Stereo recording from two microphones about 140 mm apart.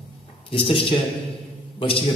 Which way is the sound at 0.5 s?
40° left (ahead or behind).